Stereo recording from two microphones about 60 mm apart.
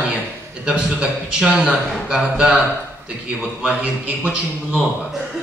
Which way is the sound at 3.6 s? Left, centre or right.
Centre.